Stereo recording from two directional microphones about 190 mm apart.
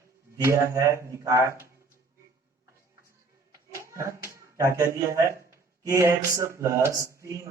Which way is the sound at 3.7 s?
15° right (ahead or behind).